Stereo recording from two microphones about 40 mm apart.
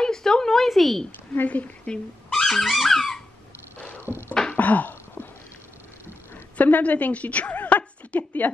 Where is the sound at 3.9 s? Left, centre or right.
Right.